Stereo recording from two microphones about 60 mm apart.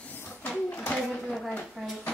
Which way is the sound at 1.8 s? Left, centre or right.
Centre.